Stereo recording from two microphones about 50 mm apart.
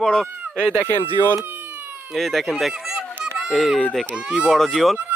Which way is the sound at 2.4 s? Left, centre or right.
Centre.